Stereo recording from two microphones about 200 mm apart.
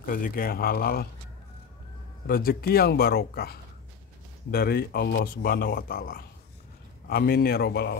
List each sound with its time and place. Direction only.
0.0 s speech: 45° left (ahead or behind)
2.2 s speech: 50° left (ahead or behind)